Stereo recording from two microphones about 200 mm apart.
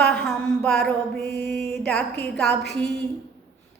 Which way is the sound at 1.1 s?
55° left (ahead or behind).